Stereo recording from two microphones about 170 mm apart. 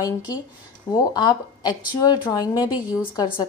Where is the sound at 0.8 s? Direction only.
20° left (ahead or behind).